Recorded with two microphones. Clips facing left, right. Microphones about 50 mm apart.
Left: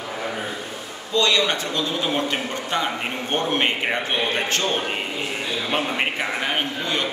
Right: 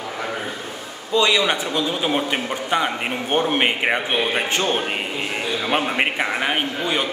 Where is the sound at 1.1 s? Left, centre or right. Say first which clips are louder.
Right 2 dB; centre.